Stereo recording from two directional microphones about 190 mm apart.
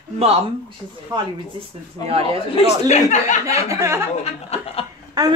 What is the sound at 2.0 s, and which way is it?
Speech, 20° left (ahead or behind).